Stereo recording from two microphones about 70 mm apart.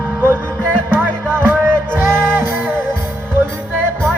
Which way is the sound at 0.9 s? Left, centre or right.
Right.